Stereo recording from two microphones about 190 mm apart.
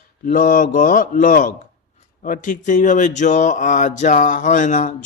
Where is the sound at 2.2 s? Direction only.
45° left (ahead or behind).